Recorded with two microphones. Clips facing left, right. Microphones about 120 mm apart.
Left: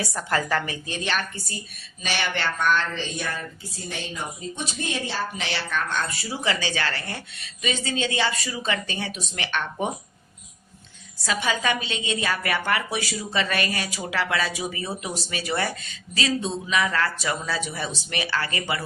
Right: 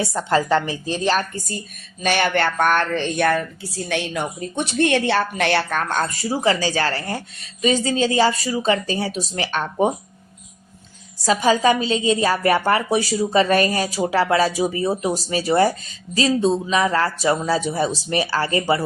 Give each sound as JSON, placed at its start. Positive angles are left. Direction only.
{"t": 0.0, "sound": "a woman's voice", "side_deg": -25}
{"t": 2.0, "sound": "a woman's voice", "side_deg": -50}
{"t": 11.2, "sound": "a woman's voice", "side_deg": -40}